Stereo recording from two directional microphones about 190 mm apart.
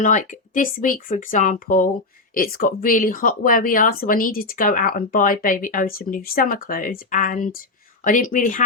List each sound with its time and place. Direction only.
0.0 s speech: 40° left (ahead or behind)